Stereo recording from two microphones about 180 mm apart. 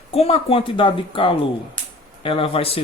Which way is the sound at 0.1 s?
35° left (ahead or behind).